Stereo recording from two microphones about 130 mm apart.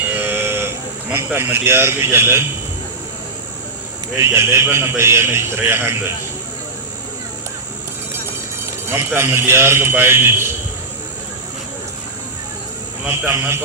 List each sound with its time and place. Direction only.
0.1 s sheep: 15° right (ahead or behind)
1.1 s a man's voice: 20° right (ahead or behind)
4.2 s a man's voice: 20° right (ahead or behind)
8.9 s a man's voice: 20° right (ahead or behind)
13.1 s a man's voice: 15° right (ahead or behind)